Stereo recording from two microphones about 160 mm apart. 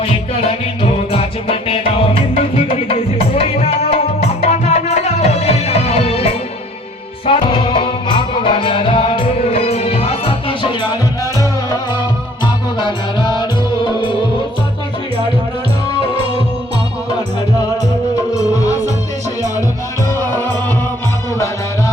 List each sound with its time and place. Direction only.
0.3 s music: 40° left (ahead or behind)
12.8 s music: 30° left (ahead or behind)
20.1 s music: 15° left (ahead or behind)